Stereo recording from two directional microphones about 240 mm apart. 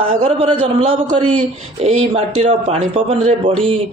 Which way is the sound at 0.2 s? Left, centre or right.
Right.